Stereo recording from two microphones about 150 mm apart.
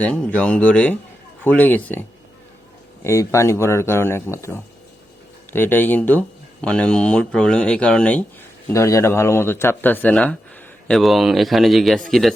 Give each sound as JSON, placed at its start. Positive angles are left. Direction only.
{"t": 0.0, "sound": "speech", "side_deg": 5}
{"t": 8.6, "sound": "a man's voice", "side_deg": 20}